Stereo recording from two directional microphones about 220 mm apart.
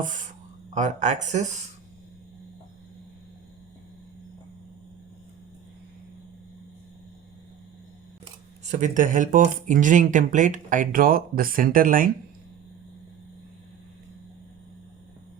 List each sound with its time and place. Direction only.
0.0 s speech: 35° right (ahead or behind)
8.6 s speech: 35° right (ahead or behind)